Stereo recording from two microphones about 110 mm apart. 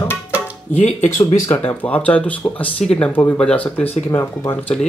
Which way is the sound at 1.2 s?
25° left (ahead or behind).